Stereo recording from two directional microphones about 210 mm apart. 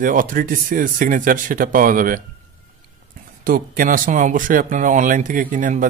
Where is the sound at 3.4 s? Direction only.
40° right (ahead or behind).